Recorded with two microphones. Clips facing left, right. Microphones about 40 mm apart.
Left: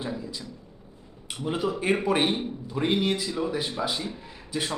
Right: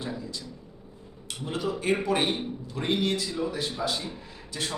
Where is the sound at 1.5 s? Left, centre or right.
Centre.